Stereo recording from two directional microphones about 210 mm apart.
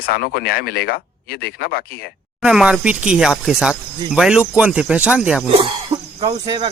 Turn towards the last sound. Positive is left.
turn(degrees=-20)  # may be behind; listen again after turning